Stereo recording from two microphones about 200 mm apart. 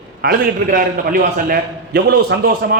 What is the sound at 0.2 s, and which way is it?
A man's voice, 50° right (ahead or behind).